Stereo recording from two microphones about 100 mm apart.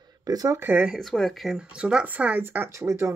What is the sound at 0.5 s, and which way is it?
Speech, 20° right (ahead or behind).